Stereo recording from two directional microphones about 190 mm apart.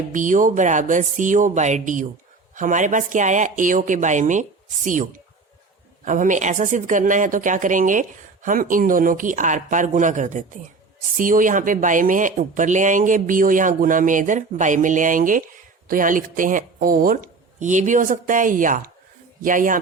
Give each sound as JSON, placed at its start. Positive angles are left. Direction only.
{"t": 0.1, "sound": "a woman's voice", "side_deg": -40}